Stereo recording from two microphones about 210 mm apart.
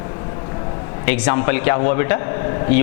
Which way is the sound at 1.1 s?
15° left (ahead or behind).